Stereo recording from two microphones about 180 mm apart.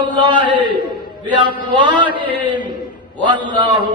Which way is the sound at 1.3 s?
25° right (ahead or behind).